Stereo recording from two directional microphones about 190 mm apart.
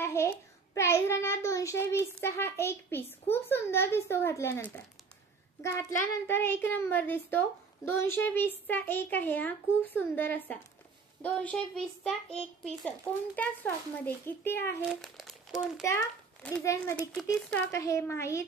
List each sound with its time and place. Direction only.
0.0 s child singing: 15° left (ahead or behind)
0.7 s a child's voice: 15° left (ahead or behind)
14.9 s crumpling: centre (ahead or behind)
16.4 s a child's voice: 15° left (ahead or behind)
17.1 s a child's voice: 5° left (ahead or behind)
17.6 s a child's voice: 15° left (ahead or behind)